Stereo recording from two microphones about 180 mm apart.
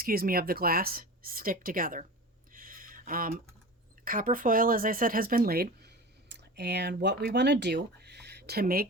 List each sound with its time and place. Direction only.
0.0 s speech: 55° right (ahead or behind)
2.5 s a sound: 50° right (ahead or behind)
4.0 s speech: 50° right (ahead or behind)